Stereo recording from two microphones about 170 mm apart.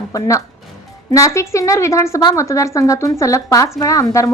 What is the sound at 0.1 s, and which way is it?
A woman's voice, 20° left (ahead or behind).